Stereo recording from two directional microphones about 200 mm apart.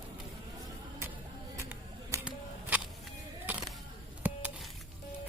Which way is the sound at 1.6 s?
10° right (ahead or behind).